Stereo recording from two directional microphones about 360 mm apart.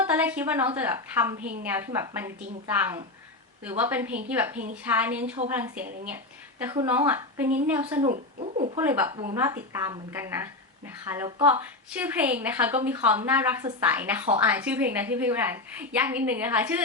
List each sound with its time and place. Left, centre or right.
0.0 s a woman's voice: centre
3.6 s a woman's voice: centre
8.8 s a woman's voice: centre